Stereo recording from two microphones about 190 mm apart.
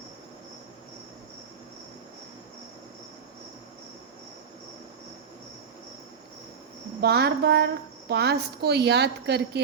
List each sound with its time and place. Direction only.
7.0 s a woman's voice: 60° right (ahead or behind)